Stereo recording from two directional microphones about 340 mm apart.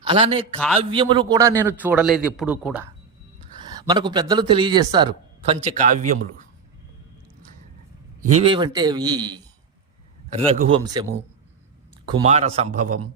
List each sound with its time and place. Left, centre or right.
0.1 s a man's voice: centre
8.3 s speech: centre
12.0 s a man's voice: centre